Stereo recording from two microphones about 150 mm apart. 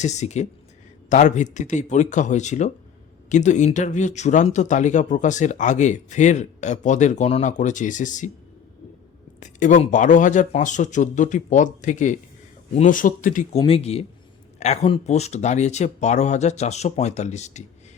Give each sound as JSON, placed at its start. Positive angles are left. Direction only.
{"t": 0.0, "sound": "speech", "side_deg": 50}
{"t": 9.4, "sound": "speech", "side_deg": 55}
{"t": 13.7, "sound": "speech", "side_deg": 40}